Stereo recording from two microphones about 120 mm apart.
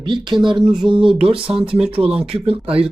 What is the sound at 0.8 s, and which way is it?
Speech, 45° right (ahead or behind).